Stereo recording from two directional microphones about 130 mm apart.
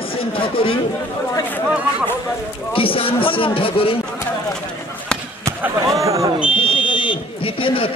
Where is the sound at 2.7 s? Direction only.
45° left (ahead or behind).